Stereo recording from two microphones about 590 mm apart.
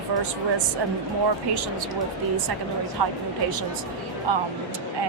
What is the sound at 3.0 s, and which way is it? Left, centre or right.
Speech, right.